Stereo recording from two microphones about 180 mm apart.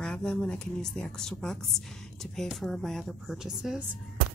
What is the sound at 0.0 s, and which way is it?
A woman's voice, 5° left (ahead or behind).